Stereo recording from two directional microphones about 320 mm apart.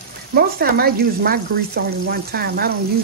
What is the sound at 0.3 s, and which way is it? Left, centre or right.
Speech, right.